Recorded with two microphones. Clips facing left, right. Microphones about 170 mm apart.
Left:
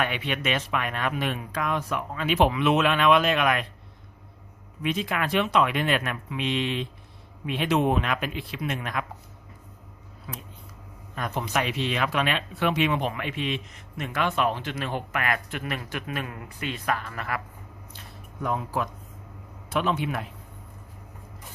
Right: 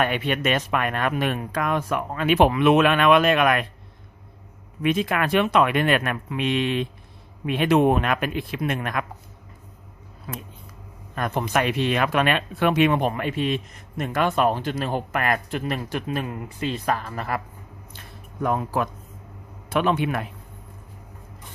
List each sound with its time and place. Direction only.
0.0 s speech: 50° right (ahead or behind)
4.8 s speech: 55° right (ahead or behind)
10.3 s speech: 55° right (ahead or behind); by 16.6 s 25° right (ahead or behind)
16.6 s speech: 35° right (ahead or behind)
18.4 s speech: 55° right (ahead or behind)